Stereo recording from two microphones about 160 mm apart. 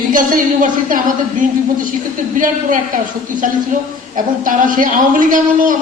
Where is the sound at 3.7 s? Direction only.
55° right (ahead or behind).